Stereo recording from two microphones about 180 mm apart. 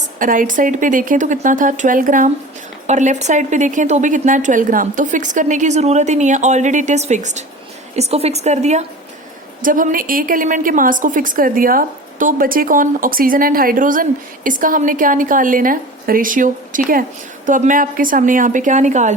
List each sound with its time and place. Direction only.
0.2 s a woman's voice: 50° right (ahead or behind)
9.6 s a woman's voice: 50° right (ahead or behind)